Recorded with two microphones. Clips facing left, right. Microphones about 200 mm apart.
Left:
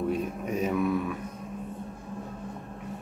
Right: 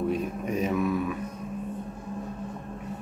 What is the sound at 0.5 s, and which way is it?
Mantra, 10° left (ahead or behind).